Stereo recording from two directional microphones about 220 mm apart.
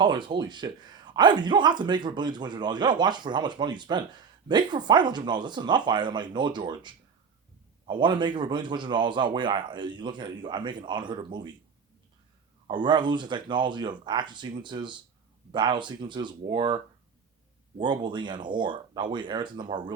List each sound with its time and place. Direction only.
0.0 s speech: 20° right (ahead or behind)
12.6 s speech: 20° right (ahead or behind)